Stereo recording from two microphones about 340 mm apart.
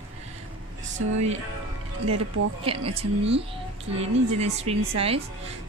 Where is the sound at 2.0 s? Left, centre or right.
Right.